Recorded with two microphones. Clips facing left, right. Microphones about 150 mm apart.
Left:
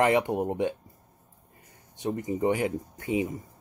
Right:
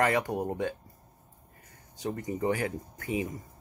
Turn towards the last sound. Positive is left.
turn(degrees=20)  # may be behind; listen again after turning